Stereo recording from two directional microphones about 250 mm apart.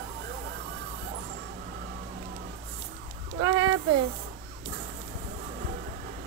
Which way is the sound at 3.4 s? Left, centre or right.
Right.